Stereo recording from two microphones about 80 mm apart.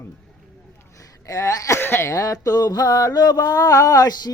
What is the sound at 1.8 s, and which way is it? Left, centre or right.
Speech, left.